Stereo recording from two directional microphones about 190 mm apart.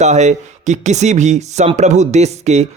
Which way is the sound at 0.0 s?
35° right (ahead or behind).